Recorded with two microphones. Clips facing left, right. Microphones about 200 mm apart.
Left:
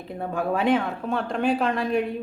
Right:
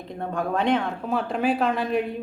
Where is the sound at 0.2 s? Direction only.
5° left (ahead or behind).